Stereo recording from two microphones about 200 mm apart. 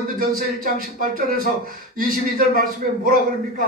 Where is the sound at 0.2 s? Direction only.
45° right (ahead or behind).